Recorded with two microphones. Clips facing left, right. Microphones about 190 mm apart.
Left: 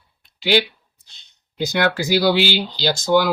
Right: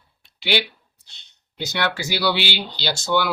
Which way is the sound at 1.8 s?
45° left (ahead or behind).